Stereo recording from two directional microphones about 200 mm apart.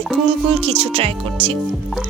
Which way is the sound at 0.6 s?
30° right (ahead or behind).